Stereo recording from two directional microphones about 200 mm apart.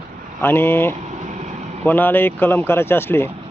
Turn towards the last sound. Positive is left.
turn(degrees=10)  # may be behind; listen again after turning